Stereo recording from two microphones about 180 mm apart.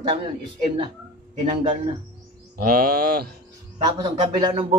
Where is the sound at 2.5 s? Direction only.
55° right (ahead or behind).